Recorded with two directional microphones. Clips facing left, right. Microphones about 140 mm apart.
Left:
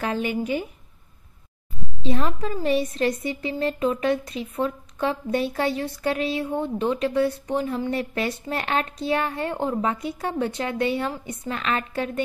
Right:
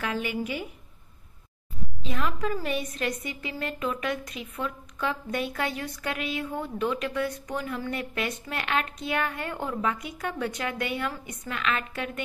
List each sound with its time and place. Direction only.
0.0 s a woman's voice: 35° left (ahead or behind)
2.0 s a woman's voice: 35° left (ahead or behind)